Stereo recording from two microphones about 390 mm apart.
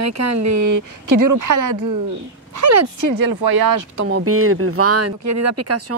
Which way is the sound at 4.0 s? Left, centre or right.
Right.